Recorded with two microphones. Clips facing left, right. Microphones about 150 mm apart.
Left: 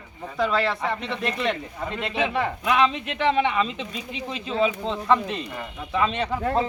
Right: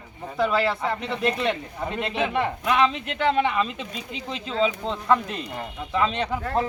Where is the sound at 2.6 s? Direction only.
Centre (ahead or behind).